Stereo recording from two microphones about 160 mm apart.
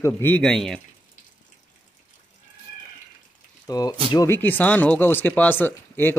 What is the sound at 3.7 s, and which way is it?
Speech, 20° left (ahead or behind).